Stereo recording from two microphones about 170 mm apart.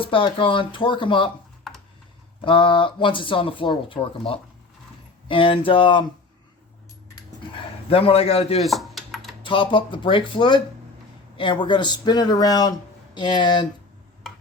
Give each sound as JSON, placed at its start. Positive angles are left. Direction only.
{"t": 0.0, "sound": "speech", "side_deg": 30}
{"t": 2.4, "sound": "speech", "side_deg": 30}
{"t": 7.5, "sound": "a man's voice", "side_deg": 35}
{"t": 8.6, "sound": "dishes", "side_deg": 0}
{"t": 9.4, "sound": "speech", "side_deg": 30}